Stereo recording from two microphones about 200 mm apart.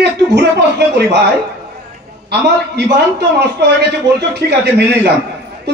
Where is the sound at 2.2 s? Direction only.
55° right (ahead or behind).